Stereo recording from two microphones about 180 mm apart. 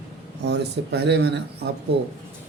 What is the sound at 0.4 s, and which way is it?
Speech, 70° right (ahead or behind).